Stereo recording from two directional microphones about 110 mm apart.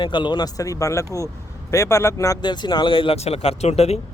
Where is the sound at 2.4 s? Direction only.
45° left (ahead or behind); by 4.0 s 70° left (ahead or behind).